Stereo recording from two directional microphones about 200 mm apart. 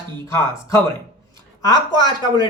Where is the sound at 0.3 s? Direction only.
15° left (ahead or behind).